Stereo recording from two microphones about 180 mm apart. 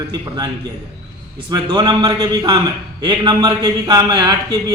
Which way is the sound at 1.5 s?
20° right (ahead or behind).